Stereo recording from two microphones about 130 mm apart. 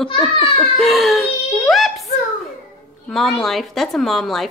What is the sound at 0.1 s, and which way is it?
Speech, 45° left (ahead or behind).